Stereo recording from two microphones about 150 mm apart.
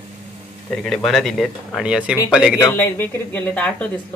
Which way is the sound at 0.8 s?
Centre (ahead or behind).